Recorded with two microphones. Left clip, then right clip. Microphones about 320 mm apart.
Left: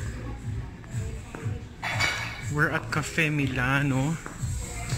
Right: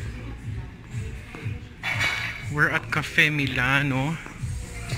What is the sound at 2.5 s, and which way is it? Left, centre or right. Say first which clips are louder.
Speech: right 3 dB; centre.